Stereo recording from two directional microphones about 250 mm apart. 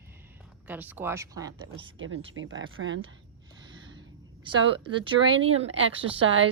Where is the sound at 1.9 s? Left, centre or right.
Right.